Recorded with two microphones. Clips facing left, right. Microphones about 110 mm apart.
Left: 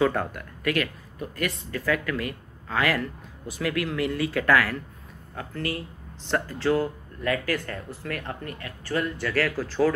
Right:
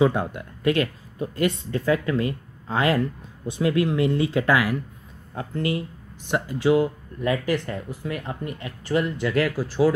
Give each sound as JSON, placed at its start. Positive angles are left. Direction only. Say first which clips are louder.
{"t": 0.0, "sound": "speech", "louder": "right 3 dB", "side_deg": -15}